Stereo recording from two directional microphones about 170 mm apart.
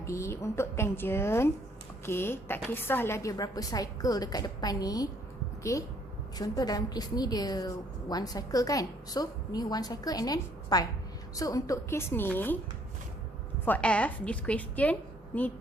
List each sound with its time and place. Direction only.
0.0 s a woman's voice: 15° left (ahead or behind)
13.7 s a woman's voice: 10° left (ahead or behind)